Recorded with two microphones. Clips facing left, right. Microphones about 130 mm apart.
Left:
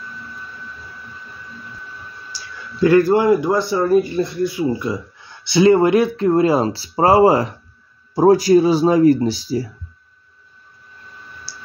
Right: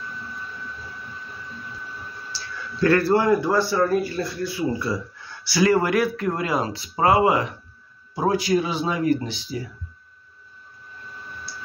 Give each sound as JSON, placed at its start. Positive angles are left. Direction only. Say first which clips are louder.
{"t": 2.3, "sound": "a man's voice", "louder": "right 1 dB", "side_deg": 15}
{"t": 11.5, "sound": "clicking", "louder": "right 2 dB", "side_deg": 35}